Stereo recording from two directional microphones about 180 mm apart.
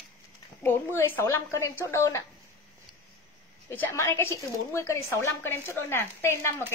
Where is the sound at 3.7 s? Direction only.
10° left (ahead or behind).